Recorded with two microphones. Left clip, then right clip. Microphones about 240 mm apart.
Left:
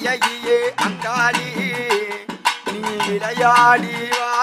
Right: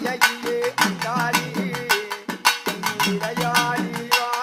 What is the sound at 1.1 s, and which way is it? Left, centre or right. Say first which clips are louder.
Music: left 6 dB; left.